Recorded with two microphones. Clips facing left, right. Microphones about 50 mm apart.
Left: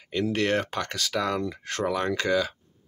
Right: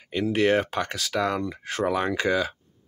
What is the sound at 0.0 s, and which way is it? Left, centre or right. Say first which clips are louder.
Speech: right 3 dB; centre.